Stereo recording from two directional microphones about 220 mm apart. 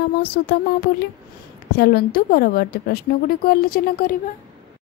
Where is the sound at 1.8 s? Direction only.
45° left (ahead or behind).